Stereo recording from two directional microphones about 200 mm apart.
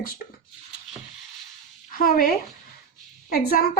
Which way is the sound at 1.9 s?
45° left (ahead or behind).